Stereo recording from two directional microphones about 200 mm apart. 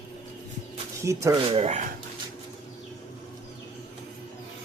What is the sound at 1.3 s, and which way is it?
Speech, 30° right (ahead or behind).